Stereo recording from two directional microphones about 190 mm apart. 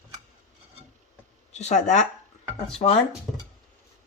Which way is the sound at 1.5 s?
35° left (ahead or behind).